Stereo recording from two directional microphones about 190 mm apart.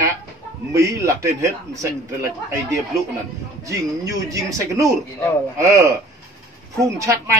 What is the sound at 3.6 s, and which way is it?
A man's voice, 15° right (ahead or behind).